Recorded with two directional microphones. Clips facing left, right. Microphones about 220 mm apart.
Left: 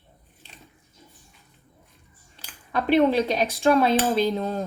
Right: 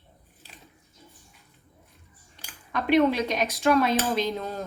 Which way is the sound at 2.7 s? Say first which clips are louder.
Left 2 dB; 30° left (ahead or behind).